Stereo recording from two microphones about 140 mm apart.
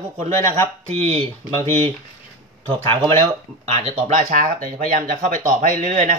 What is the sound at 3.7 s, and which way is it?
Speech, 50° right (ahead or behind).